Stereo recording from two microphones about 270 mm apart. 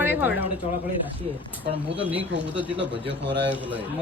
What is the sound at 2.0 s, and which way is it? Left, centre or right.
Speech, centre.